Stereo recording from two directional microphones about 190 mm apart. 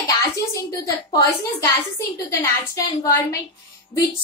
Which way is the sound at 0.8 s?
15° left (ahead or behind).